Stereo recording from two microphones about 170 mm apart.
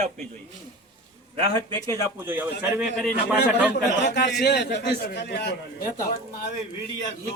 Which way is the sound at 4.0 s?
80° left.